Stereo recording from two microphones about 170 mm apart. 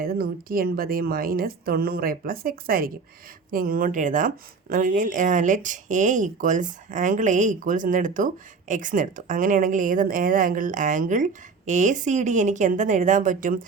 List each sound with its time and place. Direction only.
0.0 s a woman's voice: 60° right (ahead or behind)